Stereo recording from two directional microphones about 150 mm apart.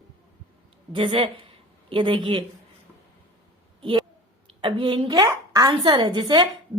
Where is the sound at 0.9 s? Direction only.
35° right (ahead or behind).